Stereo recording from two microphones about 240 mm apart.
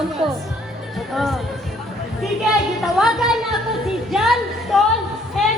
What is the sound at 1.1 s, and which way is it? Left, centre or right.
Speech, centre.